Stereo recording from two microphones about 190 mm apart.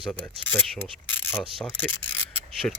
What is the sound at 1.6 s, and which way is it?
Speech, 10° left (ahead or behind).